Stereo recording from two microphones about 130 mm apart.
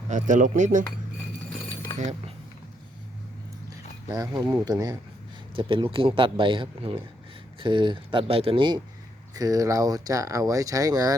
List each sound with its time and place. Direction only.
0.1 s speech: 80° right
4.1 s speech: 30° right (ahead or behind)
5.5 s speech: 40° right (ahead or behind)
9.3 s speech: 30° right (ahead or behind)